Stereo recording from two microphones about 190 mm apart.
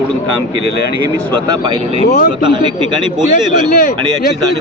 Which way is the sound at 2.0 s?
55° left (ahead or behind).